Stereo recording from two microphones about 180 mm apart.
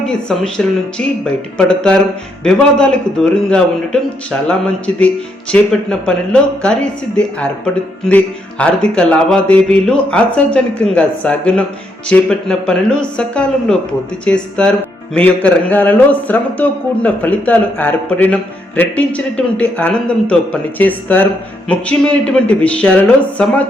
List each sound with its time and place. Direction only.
0.0 s speech: 5° left (ahead or behind)